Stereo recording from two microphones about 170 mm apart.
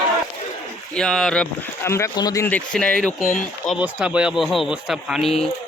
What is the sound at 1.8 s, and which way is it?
Speech, 15° left (ahead or behind).